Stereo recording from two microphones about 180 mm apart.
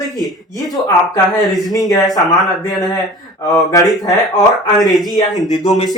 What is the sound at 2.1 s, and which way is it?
Speech, 20° left (ahead or behind).